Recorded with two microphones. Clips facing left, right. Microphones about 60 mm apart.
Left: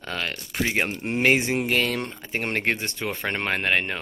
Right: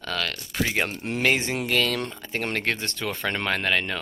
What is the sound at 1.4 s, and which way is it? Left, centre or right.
Speech, centre.